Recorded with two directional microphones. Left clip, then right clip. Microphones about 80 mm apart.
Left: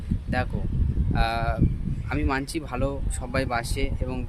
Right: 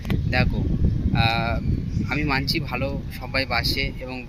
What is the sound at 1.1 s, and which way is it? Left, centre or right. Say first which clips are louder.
Speech: right 3 dB; left.